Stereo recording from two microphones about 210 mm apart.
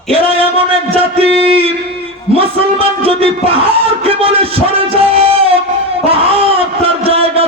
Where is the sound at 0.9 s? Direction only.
25° right (ahead or behind).